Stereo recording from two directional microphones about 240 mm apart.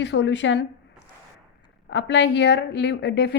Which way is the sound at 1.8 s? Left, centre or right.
Left.